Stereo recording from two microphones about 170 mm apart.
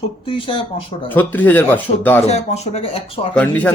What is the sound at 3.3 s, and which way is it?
Speech, 10° left (ahead or behind).